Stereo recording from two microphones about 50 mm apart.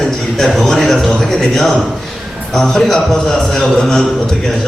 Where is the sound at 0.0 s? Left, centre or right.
Centre.